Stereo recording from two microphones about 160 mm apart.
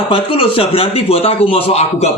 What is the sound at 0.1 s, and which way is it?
Speech, 35° left (ahead or behind).